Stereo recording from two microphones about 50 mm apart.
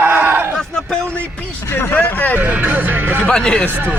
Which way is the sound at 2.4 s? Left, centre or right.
Right.